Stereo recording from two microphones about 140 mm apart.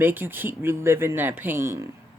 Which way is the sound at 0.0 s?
15° right (ahead or behind).